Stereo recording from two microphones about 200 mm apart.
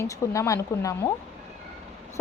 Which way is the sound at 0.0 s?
15° left (ahead or behind).